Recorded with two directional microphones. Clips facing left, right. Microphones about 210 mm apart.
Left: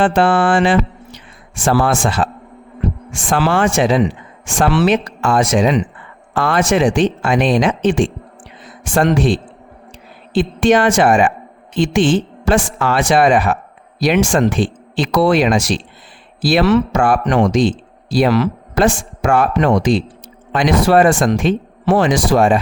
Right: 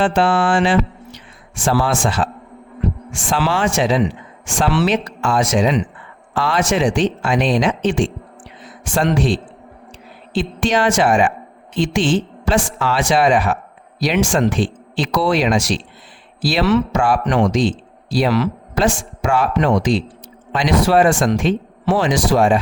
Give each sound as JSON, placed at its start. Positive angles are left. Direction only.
{"t": 0.0, "sound": "a man's voice", "side_deg": 55}